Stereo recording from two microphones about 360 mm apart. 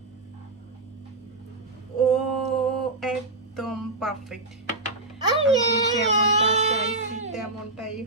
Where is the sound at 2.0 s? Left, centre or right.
Centre.